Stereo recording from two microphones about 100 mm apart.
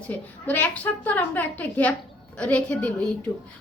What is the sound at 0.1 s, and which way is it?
A woman's voice, 15° left (ahead or behind).